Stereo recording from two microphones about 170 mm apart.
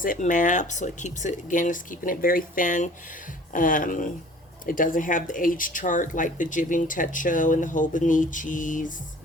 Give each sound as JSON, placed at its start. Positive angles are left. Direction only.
{"t": 0.0, "sound": "speech", "side_deg": 50}